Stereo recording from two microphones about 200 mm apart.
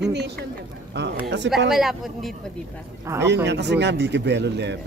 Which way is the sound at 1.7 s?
Centre (ahead or behind).